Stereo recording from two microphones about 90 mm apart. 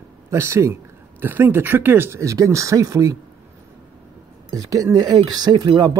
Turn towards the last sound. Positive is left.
turn(degrees=-55)  # may be behind; listen again after turning